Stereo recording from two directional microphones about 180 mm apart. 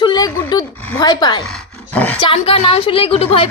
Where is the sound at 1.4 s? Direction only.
5° left (ahead or behind).